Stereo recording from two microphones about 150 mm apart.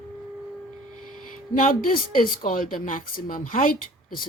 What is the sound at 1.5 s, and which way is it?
A woman's voice, 65° left (ahead or behind).